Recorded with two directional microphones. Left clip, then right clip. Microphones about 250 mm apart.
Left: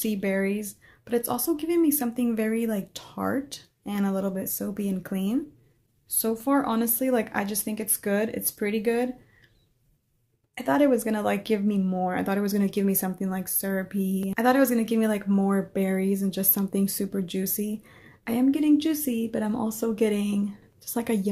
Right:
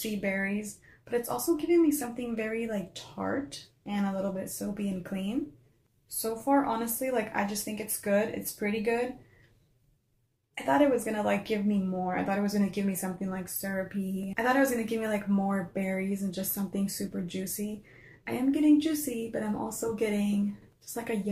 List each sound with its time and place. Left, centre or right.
0.2 s a woman's voice: left
10.5 s a woman's voice: left